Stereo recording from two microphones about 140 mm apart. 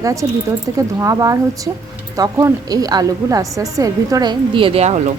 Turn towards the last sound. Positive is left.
turn(degrees=-50)  # may be behind; listen again after turning